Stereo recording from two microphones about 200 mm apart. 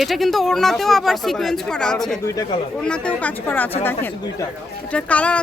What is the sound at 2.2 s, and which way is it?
Speech, 15° left (ahead or behind).